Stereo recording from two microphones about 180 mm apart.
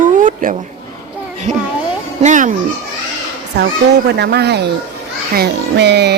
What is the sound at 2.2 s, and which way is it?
Speech, 45° right (ahead or behind).